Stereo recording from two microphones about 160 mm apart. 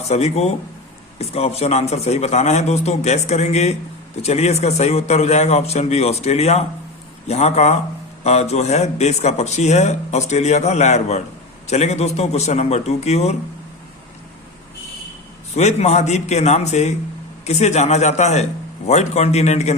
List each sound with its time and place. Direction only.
0.1 s speech: 45° left (ahead or behind)
15.5 s speech: 45° left (ahead or behind)